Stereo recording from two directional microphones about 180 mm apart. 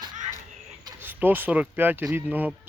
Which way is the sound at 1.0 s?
10° right (ahead or behind).